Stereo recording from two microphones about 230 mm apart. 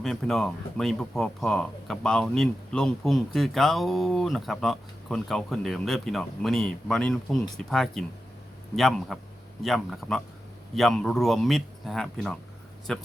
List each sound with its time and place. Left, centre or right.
0.0 s speech: centre